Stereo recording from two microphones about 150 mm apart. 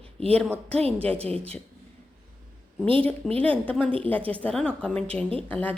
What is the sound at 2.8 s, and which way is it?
Speech, 35° right (ahead or behind).